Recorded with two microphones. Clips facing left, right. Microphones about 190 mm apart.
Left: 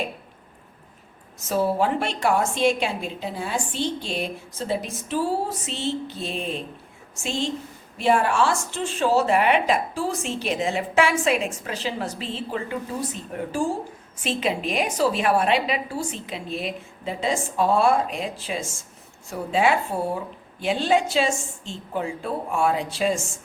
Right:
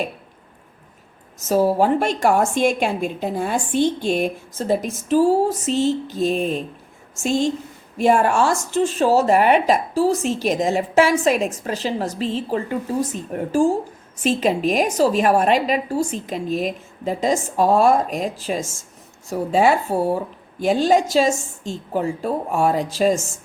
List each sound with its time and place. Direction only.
1.4 s a woman's voice: 40° right (ahead or behind)